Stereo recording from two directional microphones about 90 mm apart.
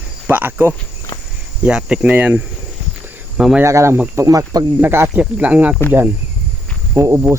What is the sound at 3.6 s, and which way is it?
Speech, 30° right (ahead or behind).